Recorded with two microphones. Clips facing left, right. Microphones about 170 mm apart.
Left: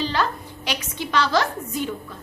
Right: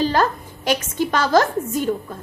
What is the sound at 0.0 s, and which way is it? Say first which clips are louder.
A woman's voice: right 5 dB; 45° right (ahead or behind).